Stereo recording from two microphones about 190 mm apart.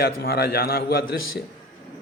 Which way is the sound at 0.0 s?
55° left (ahead or behind).